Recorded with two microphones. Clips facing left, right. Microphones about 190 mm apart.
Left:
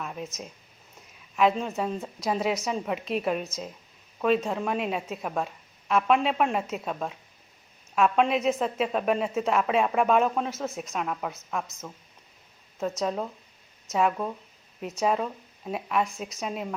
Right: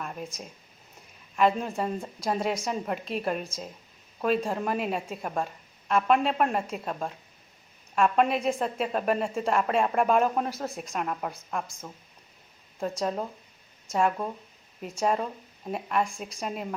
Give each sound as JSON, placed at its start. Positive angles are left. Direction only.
{"t": 0.0, "sound": "a sound", "side_deg": 0}
{"t": 1.4, "sound": "a woman's voice", "side_deg": 0}
{"t": 13.0, "sound": "a woman's voice", "side_deg": 0}